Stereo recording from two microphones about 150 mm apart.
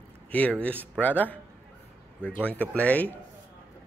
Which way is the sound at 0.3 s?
10° left (ahead or behind).